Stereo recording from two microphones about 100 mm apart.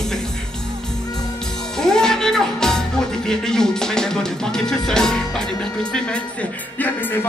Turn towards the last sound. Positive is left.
turn(degrees=20)  # may be behind; listen again after turning